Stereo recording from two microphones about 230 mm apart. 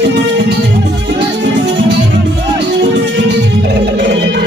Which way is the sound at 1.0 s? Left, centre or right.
Right.